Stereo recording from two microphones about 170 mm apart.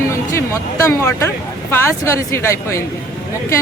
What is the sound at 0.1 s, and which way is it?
Speech, 15° left (ahead or behind).